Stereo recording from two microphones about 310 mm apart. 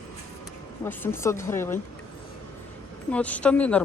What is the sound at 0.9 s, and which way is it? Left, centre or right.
Speech, centre.